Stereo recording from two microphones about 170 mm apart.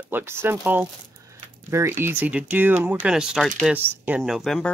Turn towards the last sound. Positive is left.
turn(degrees=0)  # may be behind; listen again after turning